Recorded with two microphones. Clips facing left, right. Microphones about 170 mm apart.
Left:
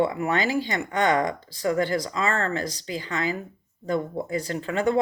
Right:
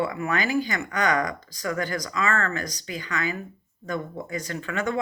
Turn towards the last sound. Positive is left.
turn(degrees=30)  # may be behind; listen again after turning